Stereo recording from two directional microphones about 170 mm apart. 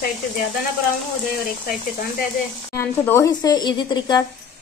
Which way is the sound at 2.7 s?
15° left (ahead or behind).